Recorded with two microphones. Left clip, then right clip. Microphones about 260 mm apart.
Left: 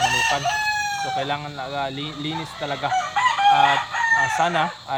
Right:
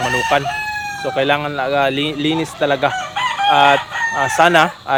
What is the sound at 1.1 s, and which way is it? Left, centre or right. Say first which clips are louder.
Speech: right 9 dB; centre.